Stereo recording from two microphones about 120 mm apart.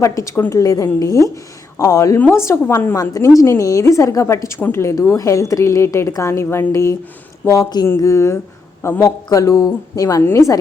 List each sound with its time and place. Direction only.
0.0 s a woman's voice: 25° left (ahead or behind)